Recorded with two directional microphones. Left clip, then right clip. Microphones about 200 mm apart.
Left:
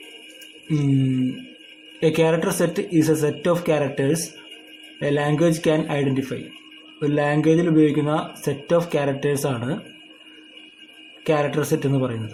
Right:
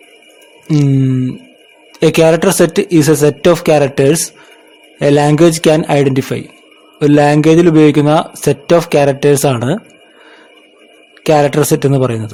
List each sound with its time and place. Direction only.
2.0 s a man's voice: 50° right (ahead or behind)
11.2 s a man's voice: 50° right (ahead or behind)